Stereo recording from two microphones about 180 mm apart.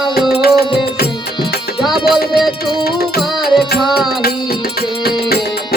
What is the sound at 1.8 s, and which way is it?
Music, centre (ahead or behind).